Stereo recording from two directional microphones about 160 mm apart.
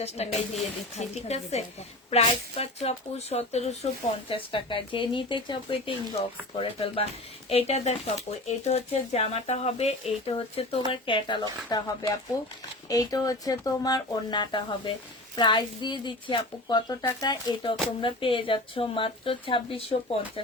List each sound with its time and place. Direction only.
0.2 s speech: 40° left (ahead or behind)